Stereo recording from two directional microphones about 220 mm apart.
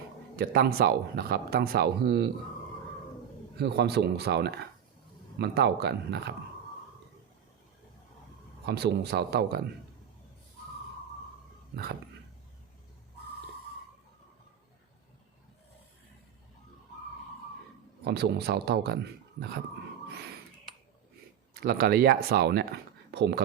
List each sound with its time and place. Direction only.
0.3 s speech: 45° right (ahead or behind)
3.6 s speech: 50° right (ahead or behind)
8.6 s speech: 50° right (ahead or behind)
18.0 s speech: 50° right (ahead or behind)
21.5 s speech: 45° right (ahead or behind)